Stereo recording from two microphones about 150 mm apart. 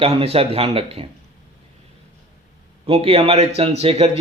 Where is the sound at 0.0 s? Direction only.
40° right (ahead or behind).